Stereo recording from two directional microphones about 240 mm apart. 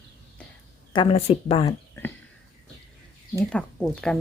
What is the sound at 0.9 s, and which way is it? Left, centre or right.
Speech, left.